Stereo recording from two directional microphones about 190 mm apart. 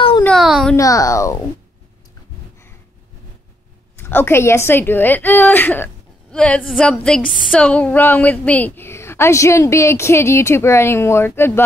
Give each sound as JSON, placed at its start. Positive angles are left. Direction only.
{"t": 0.2, "sound": "a sound", "side_deg": 0}
{"t": 0.7, "sound": "a woman's voice", "side_deg": 15}
{"t": 4.0, "sound": "a woman's voice", "side_deg": 10}